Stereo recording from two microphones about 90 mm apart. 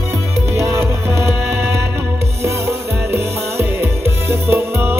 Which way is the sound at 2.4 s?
30° right (ahead or behind).